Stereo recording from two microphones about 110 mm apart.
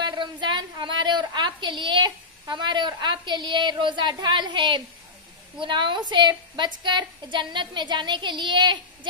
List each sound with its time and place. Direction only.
0.0 s a woman's voice: 45° right (ahead or behind)